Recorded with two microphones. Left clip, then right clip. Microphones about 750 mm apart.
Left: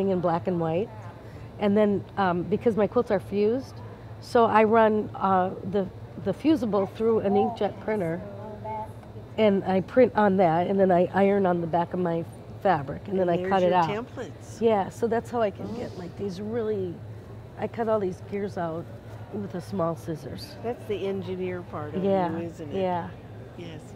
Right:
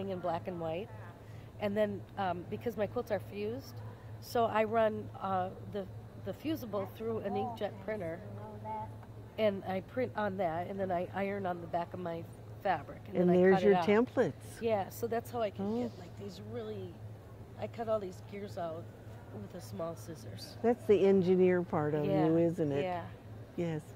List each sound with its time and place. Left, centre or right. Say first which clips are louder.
0.0 s a woman's voice: left 11 dB; left
9.4 s a woman's voice: left 10 dB; left
13.8 s speech: right 3 dB; right
14.6 s a woman's voice: left 10 dB; left
20.6 s speech: right 3 dB; right
22.0 s a woman's voice: left 6 dB; left